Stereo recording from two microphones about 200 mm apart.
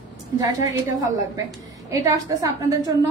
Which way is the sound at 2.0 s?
15° right (ahead or behind).